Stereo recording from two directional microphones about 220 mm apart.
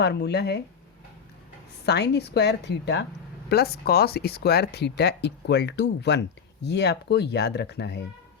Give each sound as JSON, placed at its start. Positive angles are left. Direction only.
{"t": 0.0, "sound": "speech", "side_deg": 50}
{"t": 1.9, "sound": "speech", "side_deg": 50}